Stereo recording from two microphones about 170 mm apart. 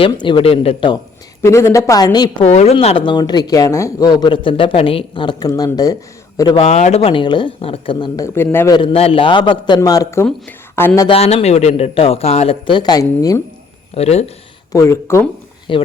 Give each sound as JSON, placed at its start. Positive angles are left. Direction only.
{"t": 0.0, "sound": "speech", "side_deg": 30}
{"t": 1.4, "sound": "a woman's voice", "side_deg": 15}
{"t": 2.4, "sound": "speech", "side_deg": 40}
{"t": 6.6, "sound": "a woman's voice", "side_deg": 40}
{"t": 11.1, "sound": "speech", "side_deg": 35}
{"t": 13.9, "sound": "speech", "side_deg": 40}
{"t": 14.7, "sound": "a woman's voice", "side_deg": 15}
{"t": 15.7, "sound": "speech", "side_deg": 30}